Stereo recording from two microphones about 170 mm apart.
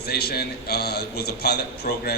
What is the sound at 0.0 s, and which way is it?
A man's voice, 70° left (ahead or behind).